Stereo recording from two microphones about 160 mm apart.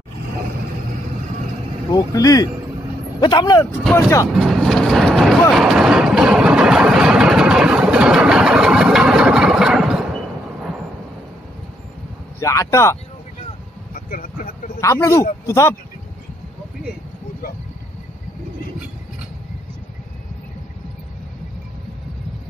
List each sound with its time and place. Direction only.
1.9 s speech: 25° left (ahead or behind)
4.3 s vehicle: centre (ahead or behind)
12.4 s speech: 20° left (ahead or behind)
13.9 s a sound: 60° left (ahead or behind)
14.8 s speech: 20° left (ahead or behind)